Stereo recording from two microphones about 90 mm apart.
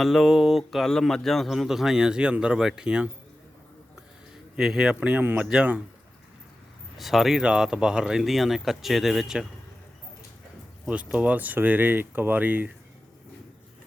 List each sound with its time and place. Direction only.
0.0 s speech: centre (ahead or behind)
4.5 s speech: 5° right (ahead or behind)
7.0 s speech: centre (ahead or behind)
10.8 s speech: 15° right (ahead or behind)